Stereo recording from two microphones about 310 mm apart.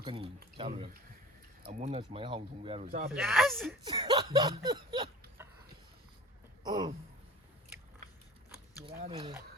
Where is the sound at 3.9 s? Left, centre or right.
Centre.